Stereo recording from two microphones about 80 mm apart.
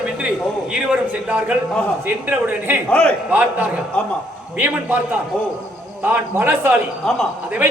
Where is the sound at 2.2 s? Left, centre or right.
Right.